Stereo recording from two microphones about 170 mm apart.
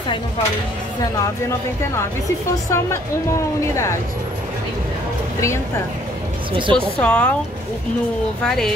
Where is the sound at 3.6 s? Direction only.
15° left (ahead or behind).